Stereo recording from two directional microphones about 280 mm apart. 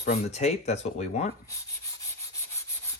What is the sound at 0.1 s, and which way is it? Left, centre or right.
Speech, left.